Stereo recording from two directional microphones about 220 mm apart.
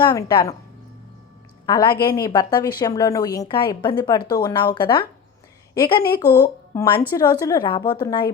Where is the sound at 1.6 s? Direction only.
20° left (ahead or behind).